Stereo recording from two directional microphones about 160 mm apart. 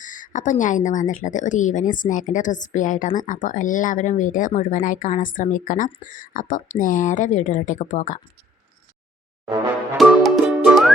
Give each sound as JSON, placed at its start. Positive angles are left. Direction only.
{"t": 0.0, "sound": "speech", "side_deg": 55}
{"t": 10.0, "sound": "music", "side_deg": 0}